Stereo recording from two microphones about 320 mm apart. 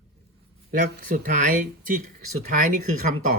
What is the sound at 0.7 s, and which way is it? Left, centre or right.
Speech, right.